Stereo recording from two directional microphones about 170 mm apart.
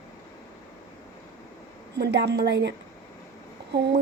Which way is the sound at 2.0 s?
80° right.